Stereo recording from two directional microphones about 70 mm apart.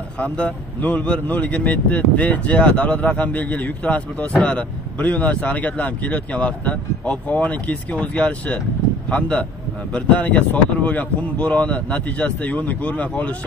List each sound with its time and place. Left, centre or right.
0.2 s speech: centre